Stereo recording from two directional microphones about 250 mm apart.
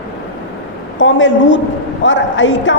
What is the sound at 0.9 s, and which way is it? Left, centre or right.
A woman's voice, left.